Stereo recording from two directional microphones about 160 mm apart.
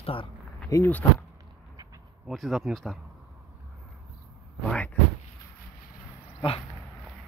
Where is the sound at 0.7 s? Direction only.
15° left (ahead or behind).